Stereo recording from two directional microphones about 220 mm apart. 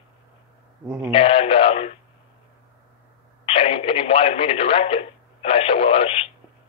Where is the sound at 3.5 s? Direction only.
25° left (ahead or behind).